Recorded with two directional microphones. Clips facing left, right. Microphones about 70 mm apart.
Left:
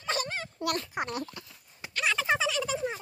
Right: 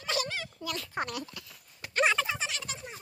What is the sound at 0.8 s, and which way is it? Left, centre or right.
Speech, centre.